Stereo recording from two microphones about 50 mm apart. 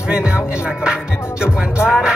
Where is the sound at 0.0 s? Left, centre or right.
Centre.